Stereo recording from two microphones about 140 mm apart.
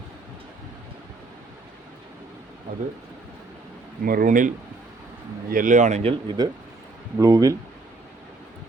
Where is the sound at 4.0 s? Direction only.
90° right; by 6.1 s 50° right (ahead or behind).